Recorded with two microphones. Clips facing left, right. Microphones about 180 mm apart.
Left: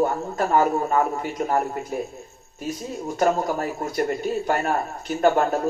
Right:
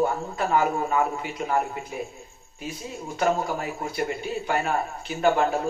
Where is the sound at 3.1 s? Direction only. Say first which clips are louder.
Left 3 dB; 45° left (ahead or behind).